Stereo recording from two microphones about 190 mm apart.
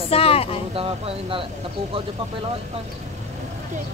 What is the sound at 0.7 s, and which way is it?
Speech, 30° right (ahead or behind).